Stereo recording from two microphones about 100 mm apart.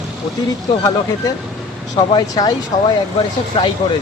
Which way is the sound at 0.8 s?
35° left (ahead or behind).